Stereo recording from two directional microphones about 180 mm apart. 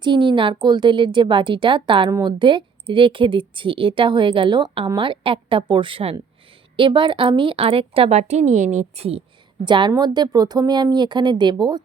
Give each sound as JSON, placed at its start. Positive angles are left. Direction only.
{"t": 0.0, "sound": "a woman's voice", "side_deg": -25}